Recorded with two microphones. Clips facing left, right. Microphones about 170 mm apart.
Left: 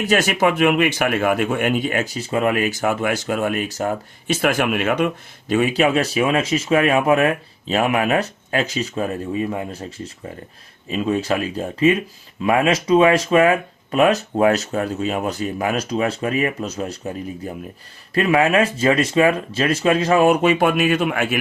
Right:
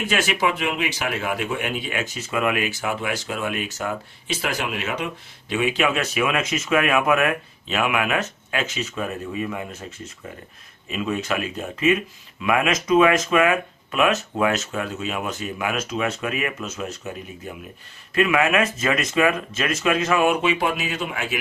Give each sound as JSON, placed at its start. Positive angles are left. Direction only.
{"t": 0.0, "sound": "a man's voice", "side_deg": 45}
{"t": 4.4, "sound": "speech", "side_deg": 55}